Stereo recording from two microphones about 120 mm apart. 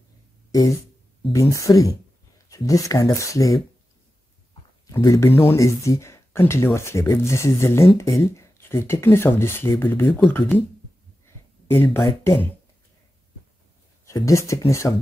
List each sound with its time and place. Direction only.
0.5 s speech: 30° left (ahead or behind)
4.8 s speech: 25° left (ahead or behind)
11.2 s a sound: 20° left (ahead or behind)
12.2 s speech: 20° left (ahead or behind)
14.0 s speech: 25° left (ahead or behind)